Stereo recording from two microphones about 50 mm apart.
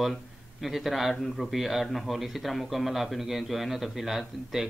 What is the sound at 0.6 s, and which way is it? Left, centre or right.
Speech, centre.